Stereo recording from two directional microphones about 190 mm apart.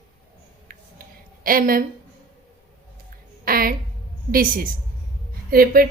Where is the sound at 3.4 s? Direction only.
50° right (ahead or behind).